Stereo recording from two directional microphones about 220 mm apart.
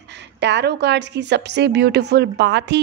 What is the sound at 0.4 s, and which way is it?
A woman's voice, 50° right (ahead or behind).